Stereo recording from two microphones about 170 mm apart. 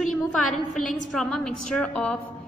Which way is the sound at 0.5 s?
45° left (ahead or behind).